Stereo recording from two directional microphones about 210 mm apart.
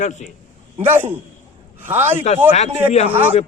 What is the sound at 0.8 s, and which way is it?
Speech, 10° right (ahead or behind).